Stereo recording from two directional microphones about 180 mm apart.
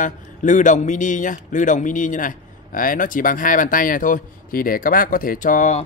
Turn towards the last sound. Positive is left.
turn(degrees=45)  # may be behind; listen again after turning